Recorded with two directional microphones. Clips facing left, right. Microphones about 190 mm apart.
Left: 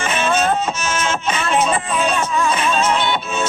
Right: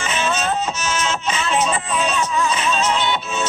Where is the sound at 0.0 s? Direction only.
55° left (ahead or behind).